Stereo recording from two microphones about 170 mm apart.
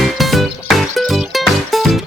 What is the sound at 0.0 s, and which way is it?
Music, centre (ahead or behind).